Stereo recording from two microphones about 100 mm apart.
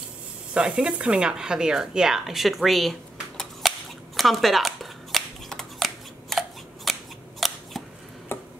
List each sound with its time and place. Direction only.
0.6 s speech: 10° right (ahead or behind)
4.2 s scissors: centre (ahead or behind)
8.3 s tick-tock: 25° left (ahead or behind)